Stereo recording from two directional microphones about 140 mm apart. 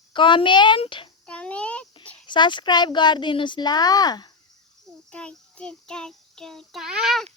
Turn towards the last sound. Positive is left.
turn(degrees=0)  # may be behind; listen again after turning